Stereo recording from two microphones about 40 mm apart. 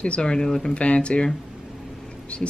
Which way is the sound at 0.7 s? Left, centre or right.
Left.